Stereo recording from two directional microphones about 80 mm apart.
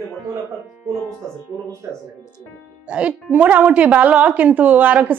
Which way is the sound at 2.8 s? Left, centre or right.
Centre.